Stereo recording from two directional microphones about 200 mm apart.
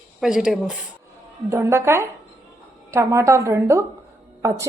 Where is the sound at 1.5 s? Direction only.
15° right (ahead or behind).